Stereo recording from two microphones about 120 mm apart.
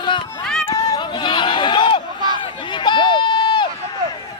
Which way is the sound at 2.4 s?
40° left (ahead or behind).